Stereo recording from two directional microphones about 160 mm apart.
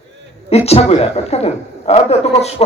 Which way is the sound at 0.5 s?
40° left (ahead or behind).